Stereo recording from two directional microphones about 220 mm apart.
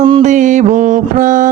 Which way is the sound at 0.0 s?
30° right (ahead or behind).